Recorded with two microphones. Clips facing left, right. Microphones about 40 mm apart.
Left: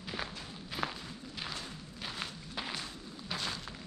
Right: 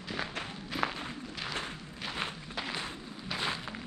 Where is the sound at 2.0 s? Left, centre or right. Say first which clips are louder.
Right 5 dB; right.